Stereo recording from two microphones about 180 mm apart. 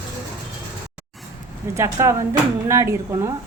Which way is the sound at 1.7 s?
15° right (ahead or behind).